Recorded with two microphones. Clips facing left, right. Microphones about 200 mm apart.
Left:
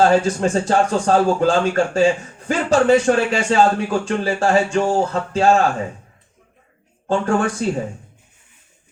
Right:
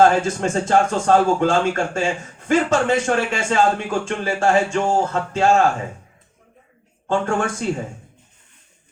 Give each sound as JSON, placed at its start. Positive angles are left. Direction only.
{"t": 0.0, "sound": "speech", "side_deg": 35}
{"t": 7.1, "sound": "speech", "side_deg": 35}